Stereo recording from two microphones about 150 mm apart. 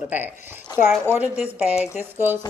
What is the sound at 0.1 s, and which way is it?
A woman's voice, 10° right (ahead or behind).